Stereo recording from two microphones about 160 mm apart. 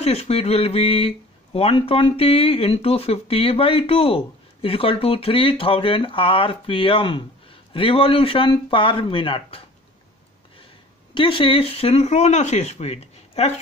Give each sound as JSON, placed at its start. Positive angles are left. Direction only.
{"t": 0.0, "sound": "speech", "side_deg": 40}
{"t": 11.1, "sound": "speech", "side_deg": 35}